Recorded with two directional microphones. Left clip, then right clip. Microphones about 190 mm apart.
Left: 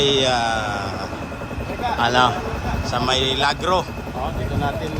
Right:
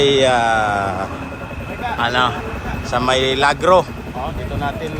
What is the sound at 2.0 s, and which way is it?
Speech, 30° left (ahead or behind).